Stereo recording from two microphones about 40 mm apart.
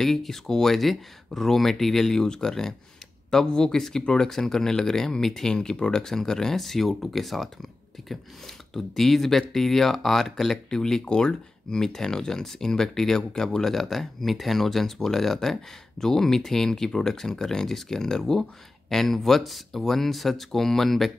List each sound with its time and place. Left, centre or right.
0.0 s speech: centre
8.7 s speech: centre
10.7 s speech: centre